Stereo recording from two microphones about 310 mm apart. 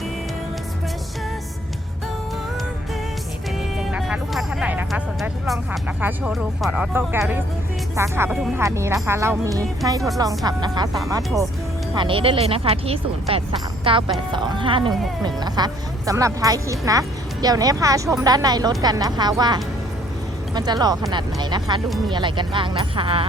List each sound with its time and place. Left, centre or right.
3.9 s music: centre
6.0 s speech: centre
21.8 s speech: centre
22.1 s speech: centre